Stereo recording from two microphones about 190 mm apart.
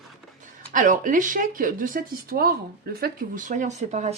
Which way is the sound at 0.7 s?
45° right (ahead or behind).